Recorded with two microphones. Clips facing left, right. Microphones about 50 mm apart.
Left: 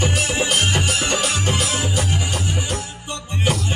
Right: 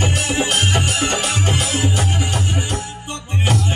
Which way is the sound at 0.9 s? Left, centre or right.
Right.